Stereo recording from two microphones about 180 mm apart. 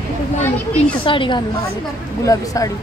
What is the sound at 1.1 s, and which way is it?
A woman's voice, 25° left (ahead or behind).